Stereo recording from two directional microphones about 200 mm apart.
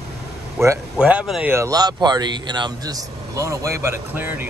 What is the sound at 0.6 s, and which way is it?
A man's voice, 15° right (ahead or behind).